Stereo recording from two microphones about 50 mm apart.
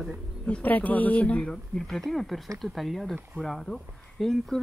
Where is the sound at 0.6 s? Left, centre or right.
Left.